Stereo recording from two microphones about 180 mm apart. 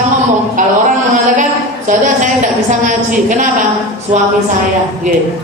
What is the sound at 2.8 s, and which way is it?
Speech, 45° right (ahead or behind).